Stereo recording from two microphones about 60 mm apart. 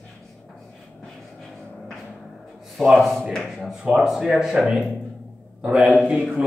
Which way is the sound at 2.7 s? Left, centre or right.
Centre.